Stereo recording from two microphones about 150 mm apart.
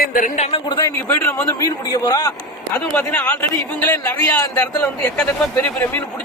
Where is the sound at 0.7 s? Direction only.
20° left (ahead or behind).